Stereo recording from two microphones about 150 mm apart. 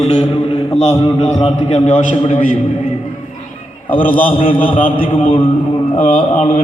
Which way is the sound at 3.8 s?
65° left (ahead or behind).